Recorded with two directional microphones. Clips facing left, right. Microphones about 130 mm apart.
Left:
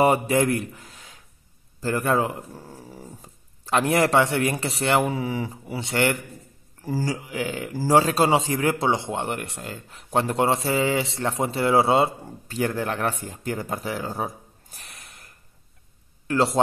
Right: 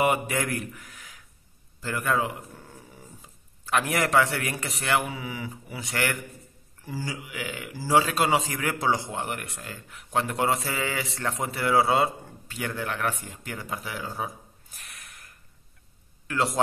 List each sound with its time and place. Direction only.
0.0 s a man's voice: 35° left (ahead or behind)
6.8 s a man's voice: 40° left (ahead or behind)
12.4 s speech: 35° left (ahead or behind)